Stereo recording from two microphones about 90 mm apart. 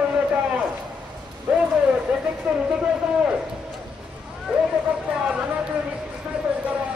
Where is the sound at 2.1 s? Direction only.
15° right (ahead or behind).